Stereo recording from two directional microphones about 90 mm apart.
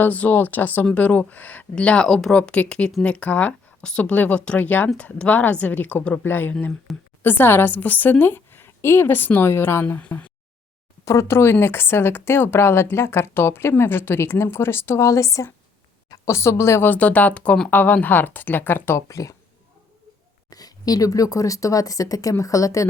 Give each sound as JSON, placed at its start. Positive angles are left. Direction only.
{"t": 0.0, "sound": "speech", "side_deg": 20}
{"t": 11.0, "sound": "a woman's voice", "side_deg": 35}
{"t": 16.8, "sound": "speech", "side_deg": 20}
{"t": 19.0, "sound": "a woman's voice", "side_deg": 35}
{"t": 20.5, "sound": "a woman's voice", "side_deg": 45}